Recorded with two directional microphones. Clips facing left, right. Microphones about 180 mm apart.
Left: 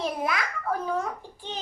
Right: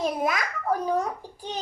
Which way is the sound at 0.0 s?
45° right (ahead or behind).